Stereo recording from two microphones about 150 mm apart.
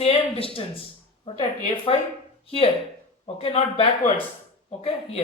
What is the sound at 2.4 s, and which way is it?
Speech, 40° left (ahead or behind).